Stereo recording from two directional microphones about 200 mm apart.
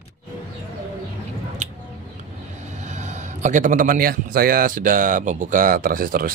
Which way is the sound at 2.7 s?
35° right (ahead or behind).